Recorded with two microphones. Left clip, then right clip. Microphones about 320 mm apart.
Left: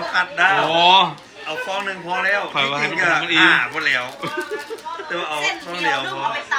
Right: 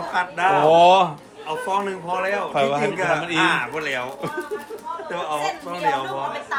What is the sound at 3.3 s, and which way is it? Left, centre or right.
Speech, right.